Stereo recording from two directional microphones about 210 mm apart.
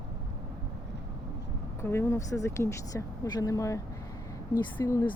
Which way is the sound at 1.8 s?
10° left (ahead or behind).